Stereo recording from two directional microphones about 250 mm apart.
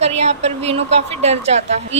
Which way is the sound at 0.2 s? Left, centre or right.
Right.